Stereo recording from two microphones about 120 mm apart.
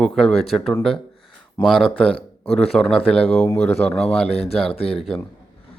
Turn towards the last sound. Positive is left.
turn(degrees=5)  # may be behind; listen again after turning